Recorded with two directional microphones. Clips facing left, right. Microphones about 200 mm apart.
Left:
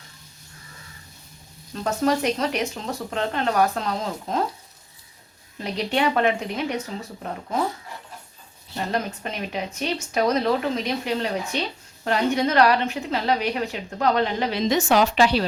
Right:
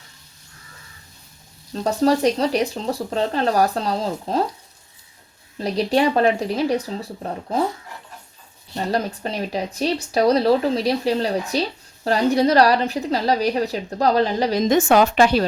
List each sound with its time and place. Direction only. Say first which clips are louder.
1.7 s a woman's voice: right 4 dB; 35° right (ahead or behind)
5.5 s a woman's voice: right 5 dB; 35° right (ahead or behind)
8.9 s a woman's voice: right 5 dB; 35° right (ahead or behind)